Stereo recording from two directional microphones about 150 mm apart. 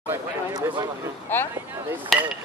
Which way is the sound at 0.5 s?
25° right (ahead or behind).